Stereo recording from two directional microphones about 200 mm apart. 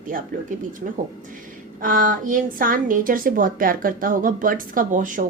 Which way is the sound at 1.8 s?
45° right (ahead or behind).